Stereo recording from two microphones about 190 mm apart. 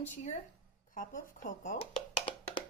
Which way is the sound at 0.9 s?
45° left (ahead or behind).